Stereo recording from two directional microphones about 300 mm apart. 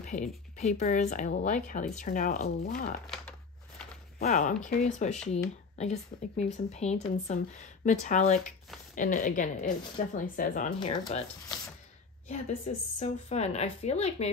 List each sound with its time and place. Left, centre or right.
0.0 s speech: left
3.1 s a sound: centre
4.2 s speech: left